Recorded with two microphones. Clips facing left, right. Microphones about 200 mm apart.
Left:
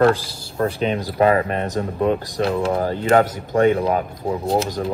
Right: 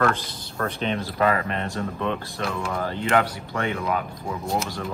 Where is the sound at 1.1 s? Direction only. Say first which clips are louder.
Left 7 dB; 30° left (ahead or behind).